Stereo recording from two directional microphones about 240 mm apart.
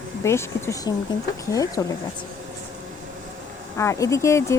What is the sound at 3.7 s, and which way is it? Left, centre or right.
Speech, centre.